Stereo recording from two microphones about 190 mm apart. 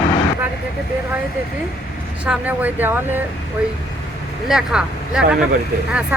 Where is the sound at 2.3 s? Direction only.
10° right (ahead or behind).